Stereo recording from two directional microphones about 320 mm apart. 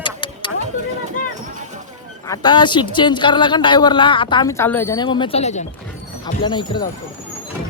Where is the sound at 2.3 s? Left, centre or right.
Centre.